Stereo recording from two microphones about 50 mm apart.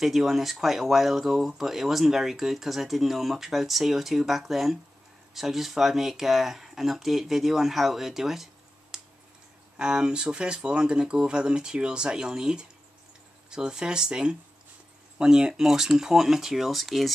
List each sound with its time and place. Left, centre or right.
0.0 s speech: centre
8.9 s a sound: centre
9.8 s speech: centre